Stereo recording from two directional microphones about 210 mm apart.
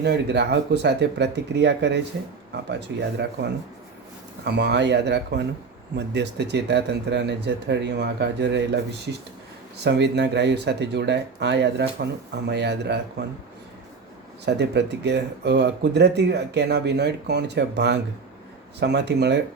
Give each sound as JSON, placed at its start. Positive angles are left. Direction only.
{"t": 0.0, "sound": "speech", "side_deg": -55}
{"t": 9.8, "sound": "speech", "side_deg": -55}
{"t": 14.4, "sound": "speech", "side_deg": -55}